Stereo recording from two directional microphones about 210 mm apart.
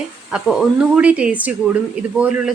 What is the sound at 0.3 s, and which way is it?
Speech, 5° right (ahead or behind).